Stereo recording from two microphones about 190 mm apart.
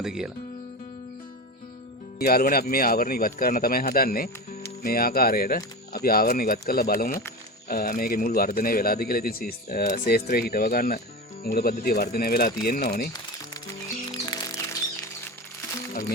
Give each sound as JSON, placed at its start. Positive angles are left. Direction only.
{"t": 0.0, "sound": "speech", "side_deg": -5}
{"t": 2.1, "sound": "speech", "side_deg": 50}
{"t": 13.4, "sound": "music", "side_deg": 20}